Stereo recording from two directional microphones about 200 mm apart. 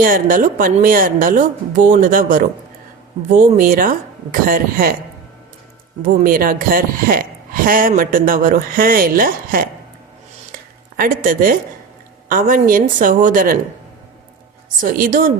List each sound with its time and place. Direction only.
0.0 s speech: 45° right (ahead or behind)
6.1 s speech: 45° right (ahead or behind)
10.9 s speech: 45° right (ahead or behind)
14.8 s speech: 45° right (ahead or behind)